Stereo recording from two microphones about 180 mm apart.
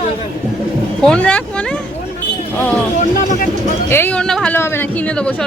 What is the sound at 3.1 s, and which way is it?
Speech, 50° left (ahead or behind).